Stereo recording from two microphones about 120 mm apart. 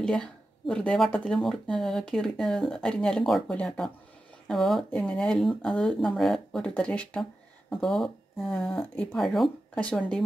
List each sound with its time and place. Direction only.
0.0 s speech: 5° left (ahead or behind)